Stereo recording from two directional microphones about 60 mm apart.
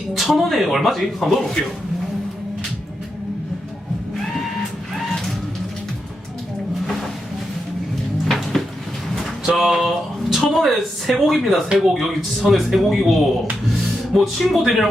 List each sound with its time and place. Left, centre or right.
0.1 s speech: centre
8.2 s cupboard open or close: centre
9.6 s speech: centre